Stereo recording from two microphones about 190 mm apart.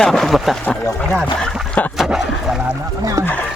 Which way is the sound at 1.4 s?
Centre (ahead or behind).